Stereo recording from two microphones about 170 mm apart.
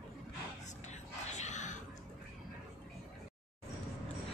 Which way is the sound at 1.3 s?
45° left (ahead or behind).